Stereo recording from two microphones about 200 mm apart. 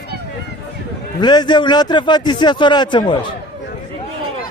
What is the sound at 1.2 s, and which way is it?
A man's voice, 20° left (ahead or behind).